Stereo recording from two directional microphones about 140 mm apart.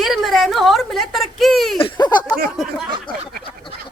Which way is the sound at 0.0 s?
Centre (ahead or behind).